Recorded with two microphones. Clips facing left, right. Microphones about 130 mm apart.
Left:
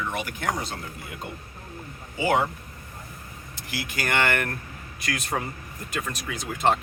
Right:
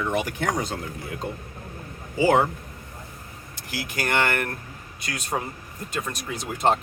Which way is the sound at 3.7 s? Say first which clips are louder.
Right 2 dB; 40° right (ahead or behind).